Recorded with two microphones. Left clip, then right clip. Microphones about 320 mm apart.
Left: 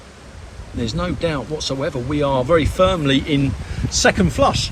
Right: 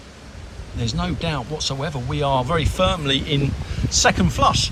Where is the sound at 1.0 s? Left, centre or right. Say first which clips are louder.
Left 4 dB; centre.